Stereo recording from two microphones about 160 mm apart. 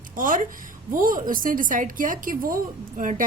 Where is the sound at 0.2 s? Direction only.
60° right (ahead or behind).